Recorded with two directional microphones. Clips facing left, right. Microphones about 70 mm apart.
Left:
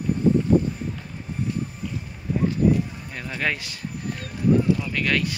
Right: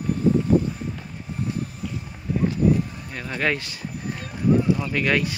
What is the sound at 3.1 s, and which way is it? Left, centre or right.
Speech, centre.